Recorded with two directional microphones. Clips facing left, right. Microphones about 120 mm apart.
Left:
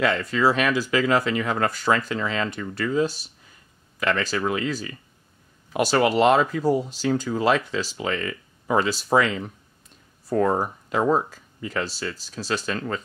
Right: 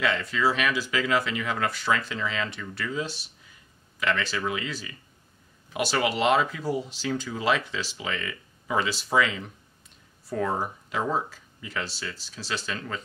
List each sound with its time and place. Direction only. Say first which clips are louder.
0.0 s speech: left 4 dB; 45° left (ahead or behind)